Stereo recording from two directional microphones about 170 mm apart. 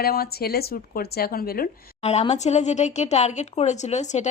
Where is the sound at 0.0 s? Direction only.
65° left (ahead or behind).